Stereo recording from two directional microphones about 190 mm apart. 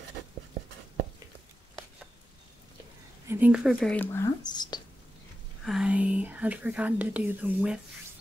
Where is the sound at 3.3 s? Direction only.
5° right (ahead or behind); by 4.8 s 20° left (ahead or behind).